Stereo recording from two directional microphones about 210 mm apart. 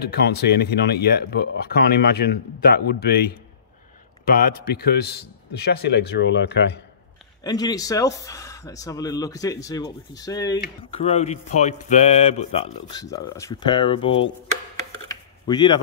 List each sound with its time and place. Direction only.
0.3 s speech: 50° left (ahead or behind)
7.4 s speech: 20° left (ahead or behind)
10.9 s speech: 30° left (ahead or behind)
13.0 s speech: 15° left (ahead or behind)
15.0 s a sound: 20° left (ahead or behind)